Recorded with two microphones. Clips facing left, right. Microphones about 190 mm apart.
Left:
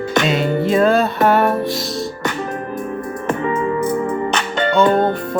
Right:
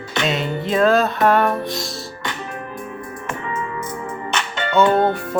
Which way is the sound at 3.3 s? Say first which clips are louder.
Left 9 dB; 35° left (ahead or behind).